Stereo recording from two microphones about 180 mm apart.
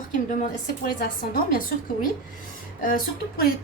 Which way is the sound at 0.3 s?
50° left (ahead or behind).